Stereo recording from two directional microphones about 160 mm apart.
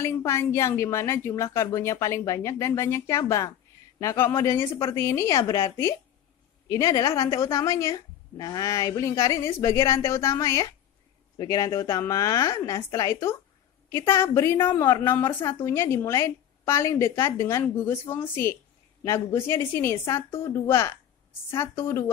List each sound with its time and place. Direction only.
0.0 s a woman's voice: 15° left (ahead or behind)